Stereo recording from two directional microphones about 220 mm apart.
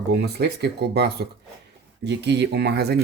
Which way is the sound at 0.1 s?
45° right (ahead or behind).